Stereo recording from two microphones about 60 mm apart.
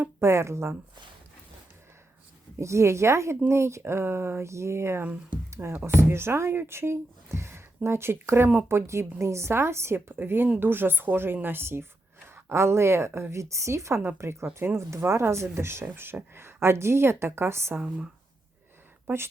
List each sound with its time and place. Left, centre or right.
0.0 s a woman's voice: right
2.6 s a woman's voice: right
14.4 s a woman's voice: right
17.7 s speech: centre